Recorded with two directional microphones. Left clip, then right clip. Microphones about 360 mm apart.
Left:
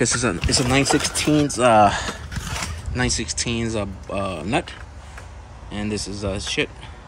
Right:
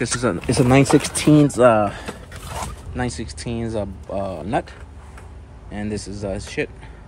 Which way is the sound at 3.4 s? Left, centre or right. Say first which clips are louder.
Left 1 dB; centre.